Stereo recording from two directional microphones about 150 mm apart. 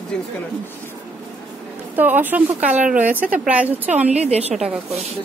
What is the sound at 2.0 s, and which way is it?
A woman's voice, 10° right (ahead or behind).